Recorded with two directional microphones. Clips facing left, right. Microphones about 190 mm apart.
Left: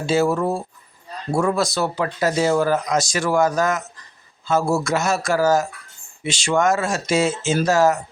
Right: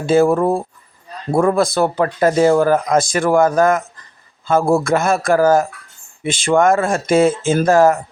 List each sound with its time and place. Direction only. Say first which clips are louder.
0.0 s speech: right 6 dB; 55° right (ahead or behind)